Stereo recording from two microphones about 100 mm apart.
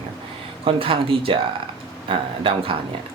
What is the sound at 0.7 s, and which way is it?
Speech, 65° right (ahead or behind).